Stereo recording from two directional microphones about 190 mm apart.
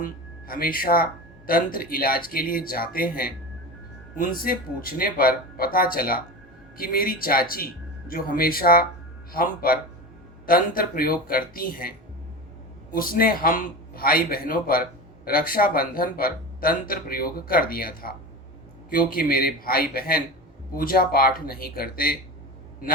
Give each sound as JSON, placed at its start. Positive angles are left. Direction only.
{"t": 0.0, "sound": "a man's voice", "side_deg": 50}